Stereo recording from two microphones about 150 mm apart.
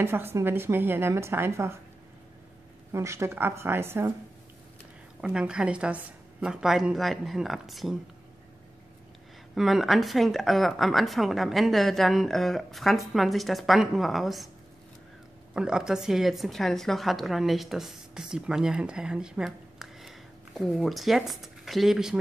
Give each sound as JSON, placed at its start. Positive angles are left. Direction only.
{"t": 0.0, "sound": "speech", "side_deg": -15}
{"t": 2.9, "sound": "speech", "side_deg": -20}
{"t": 5.2, "sound": "a woman's voice", "side_deg": -5}
{"t": 9.6, "sound": "a woman's voice", "side_deg": 0}
{"t": 15.5, "sound": "a woman's voice", "side_deg": -5}